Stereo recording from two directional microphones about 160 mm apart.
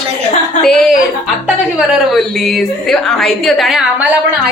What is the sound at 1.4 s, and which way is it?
Speech, 5° right (ahead or behind).